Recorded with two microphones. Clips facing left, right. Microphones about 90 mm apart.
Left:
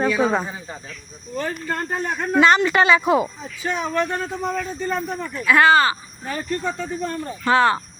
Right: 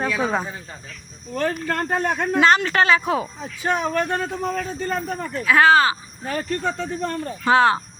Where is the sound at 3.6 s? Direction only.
50° right (ahead or behind).